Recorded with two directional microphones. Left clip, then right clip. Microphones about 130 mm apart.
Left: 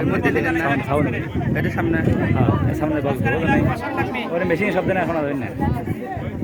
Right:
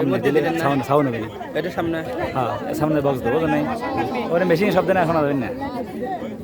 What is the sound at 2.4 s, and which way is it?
Speech, 25° right (ahead or behind).